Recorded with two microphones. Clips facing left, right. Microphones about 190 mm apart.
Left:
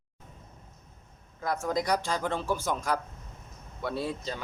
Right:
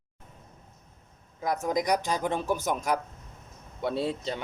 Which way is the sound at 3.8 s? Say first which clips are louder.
Right 3 dB; 25° right (ahead or behind).